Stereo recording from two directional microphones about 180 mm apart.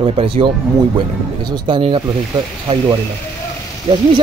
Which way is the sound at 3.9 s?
25° right (ahead or behind).